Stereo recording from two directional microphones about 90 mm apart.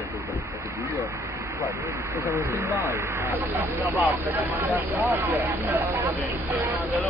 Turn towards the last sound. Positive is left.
turn(degrees=-25)  # may be behind; listen again after turning